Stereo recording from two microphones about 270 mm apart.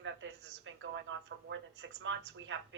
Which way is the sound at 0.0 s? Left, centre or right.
Right.